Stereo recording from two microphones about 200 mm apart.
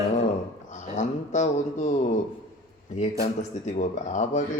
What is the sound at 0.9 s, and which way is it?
Speech, 35° left (ahead or behind).